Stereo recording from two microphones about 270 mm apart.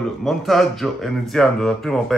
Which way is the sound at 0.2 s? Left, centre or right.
Centre.